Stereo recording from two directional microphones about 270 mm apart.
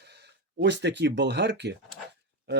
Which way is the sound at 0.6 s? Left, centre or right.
Right.